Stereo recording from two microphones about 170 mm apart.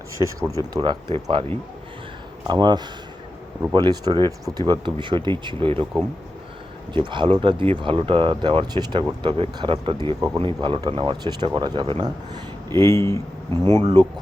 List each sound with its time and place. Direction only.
0.2 s speech: 25° right (ahead or behind)
2.5 s speech: 25° right (ahead or behind)
6.9 s speech: 30° right (ahead or behind)
12.7 s speech: 15° left (ahead or behind)
13.8 s speech: 25° right (ahead or behind)